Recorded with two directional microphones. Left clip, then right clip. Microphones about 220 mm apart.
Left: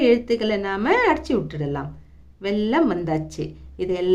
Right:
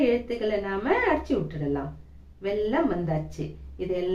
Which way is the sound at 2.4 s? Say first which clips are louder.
Left 4 dB; 50° left (ahead or behind).